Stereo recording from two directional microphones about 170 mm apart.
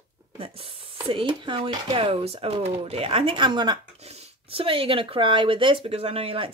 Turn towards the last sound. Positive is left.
turn(degrees=-35)  # may be behind; listen again after turning